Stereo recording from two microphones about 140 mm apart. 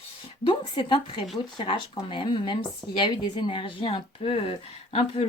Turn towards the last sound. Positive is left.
turn(degrees=45)  # may be behind; listen again after turning